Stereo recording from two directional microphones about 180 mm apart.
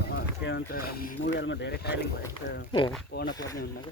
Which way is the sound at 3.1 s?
60° left (ahead or behind).